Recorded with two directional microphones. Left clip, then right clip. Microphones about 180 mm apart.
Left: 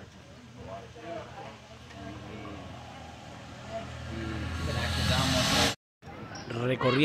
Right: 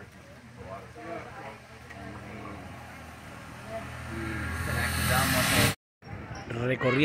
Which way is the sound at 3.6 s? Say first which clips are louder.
Right 1 dB; centre (ahead or behind).